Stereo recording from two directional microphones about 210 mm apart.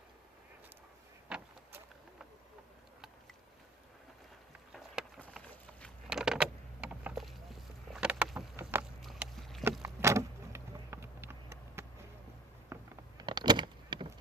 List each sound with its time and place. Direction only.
1.3 s vehicle: 5° right (ahead or behind)
4.7 s vehicle: centre (ahead or behind)
7.0 s a sound: 5° right (ahead or behind)
9.8 s vehicle: 15° right (ahead or behind)
12.7 s power windows: 20° right (ahead or behind)